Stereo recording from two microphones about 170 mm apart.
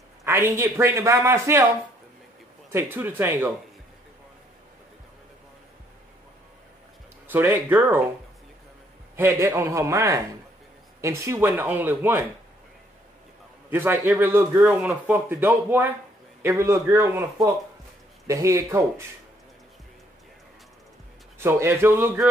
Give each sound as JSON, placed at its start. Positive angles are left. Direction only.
{"t": 0.2, "sound": "a man's voice", "side_deg": -15}
{"t": 2.7, "sound": "a man's voice", "side_deg": -15}
{"t": 7.2, "sound": "a man's voice", "side_deg": -10}
{"t": 9.1, "sound": "a man's voice", "side_deg": -15}
{"t": 13.7, "sound": "a man's voice", "side_deg": -10}
{"t": 21.4, "sound": "a man's voice", "side_deg": -15}